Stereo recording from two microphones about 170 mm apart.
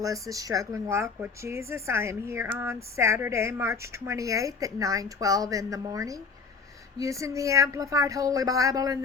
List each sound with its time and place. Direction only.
0.0 s a woman's voice: 20° right (ahead or behind)